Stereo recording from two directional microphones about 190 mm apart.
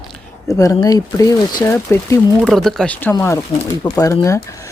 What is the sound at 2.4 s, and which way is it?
Speech, centre (ahead or behind).